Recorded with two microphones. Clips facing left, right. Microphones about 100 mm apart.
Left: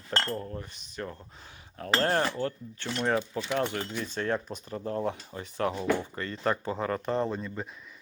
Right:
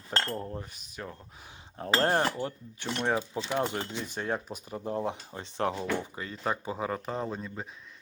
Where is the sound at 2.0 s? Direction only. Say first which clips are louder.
Even; 20° right (ahead or behind).